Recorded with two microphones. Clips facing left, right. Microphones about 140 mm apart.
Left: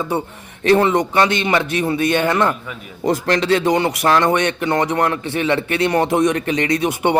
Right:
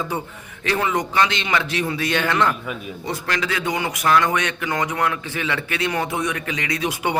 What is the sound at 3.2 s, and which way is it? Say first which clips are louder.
Speech: left 8 dB; 40° left (ahead or behind).